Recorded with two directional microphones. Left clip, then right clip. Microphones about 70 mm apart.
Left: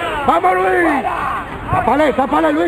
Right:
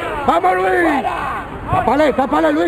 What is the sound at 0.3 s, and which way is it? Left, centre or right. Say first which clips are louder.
Speech: left 1 dB; right.